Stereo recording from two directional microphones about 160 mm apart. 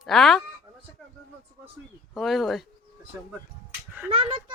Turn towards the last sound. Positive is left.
turn(degrees=-35)  # may be behind; listen again after turning